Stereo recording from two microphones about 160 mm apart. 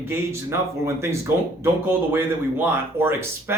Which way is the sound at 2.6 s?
15° right (ahead or behind).